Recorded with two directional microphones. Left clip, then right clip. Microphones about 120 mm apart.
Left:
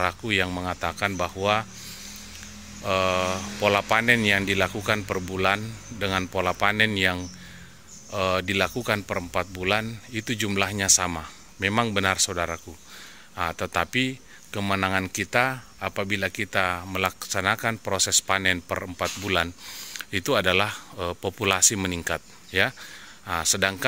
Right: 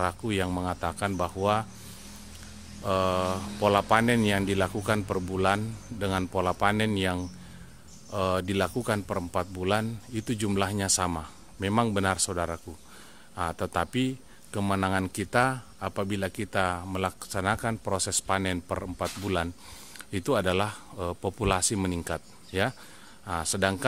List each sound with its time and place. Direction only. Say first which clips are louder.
0.0 s speech: left 5 dB; 30° right (ahead or behind)
2.8 s speech: left 3 dB; 30° right (ahead or behind)